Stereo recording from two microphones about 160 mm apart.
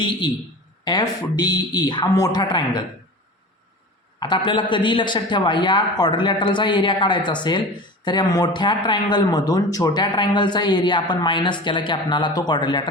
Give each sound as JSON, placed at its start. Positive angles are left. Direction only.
{"t": 0.9, "sound": "a man's voice", "side_deg": 25}
{"t": 4.2, "sound": "a man's voice", "side_deg": 30}